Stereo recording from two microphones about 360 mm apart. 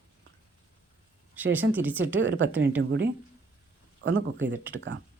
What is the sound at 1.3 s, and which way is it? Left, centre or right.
Speech, centre.